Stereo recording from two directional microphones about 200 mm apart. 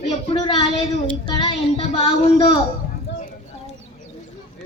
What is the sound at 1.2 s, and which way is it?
Speech, 20° left (ahead or behind).